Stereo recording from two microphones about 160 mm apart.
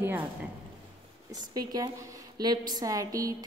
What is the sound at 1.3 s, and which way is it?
A woman's voice, 25° right (ahead or behind).